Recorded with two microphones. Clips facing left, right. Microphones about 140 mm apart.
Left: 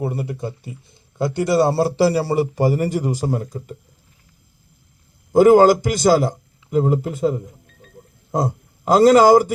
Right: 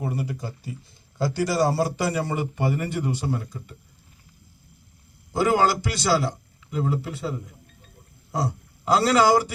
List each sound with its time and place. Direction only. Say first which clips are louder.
0.0 s a man's voice: left 5 dB; 25° left (ahead or behind); by 3.8 s 45° left (ahead or behind)
5.3 s a man's voice: left 10 dB; 45° left (ahead or behind)